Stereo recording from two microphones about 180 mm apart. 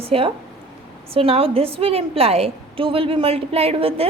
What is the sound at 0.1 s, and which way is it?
A woman's voice, 30° right (ahead or behind).